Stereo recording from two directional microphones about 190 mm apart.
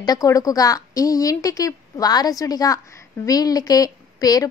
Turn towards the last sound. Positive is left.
turn(degrees=20)  # may be behind; listen again after turning